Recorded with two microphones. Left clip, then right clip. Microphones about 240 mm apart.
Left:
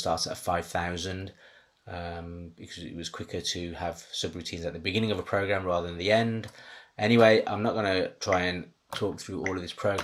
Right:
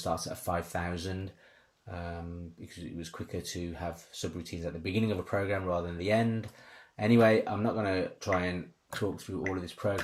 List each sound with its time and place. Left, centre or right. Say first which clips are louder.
0.3 s speech: left 4 dB; left